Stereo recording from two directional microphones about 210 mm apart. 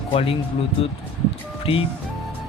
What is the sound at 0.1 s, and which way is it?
Speech, 25° left (ahead or behind).